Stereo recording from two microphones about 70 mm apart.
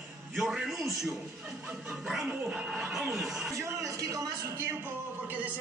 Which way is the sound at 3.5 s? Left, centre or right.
Right.